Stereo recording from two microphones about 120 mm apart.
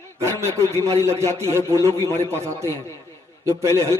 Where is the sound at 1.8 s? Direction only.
20° left (ahead or behind).